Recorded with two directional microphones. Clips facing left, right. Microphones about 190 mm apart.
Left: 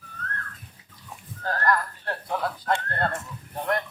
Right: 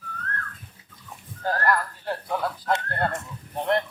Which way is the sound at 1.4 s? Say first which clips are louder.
Right 1 dB; 10° right (ahead or behind).